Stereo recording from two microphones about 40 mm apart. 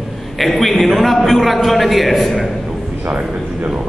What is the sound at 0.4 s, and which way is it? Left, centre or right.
A man's voice, centre.